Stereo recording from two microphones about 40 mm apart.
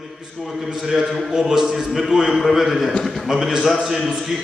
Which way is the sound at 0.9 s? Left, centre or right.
Centre.